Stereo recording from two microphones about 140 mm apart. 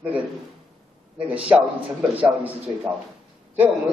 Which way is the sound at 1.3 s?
10° right (ahead or behind).